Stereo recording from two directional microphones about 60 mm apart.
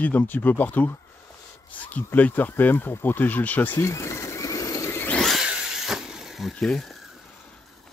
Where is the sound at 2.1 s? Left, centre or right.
Left.